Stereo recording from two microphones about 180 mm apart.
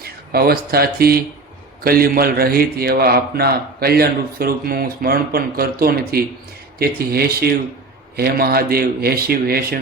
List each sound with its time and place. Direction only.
0.0 s a man's voice: 60° right (ahead or behind)